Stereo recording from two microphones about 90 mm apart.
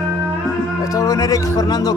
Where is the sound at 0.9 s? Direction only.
40° left (ahead or behind).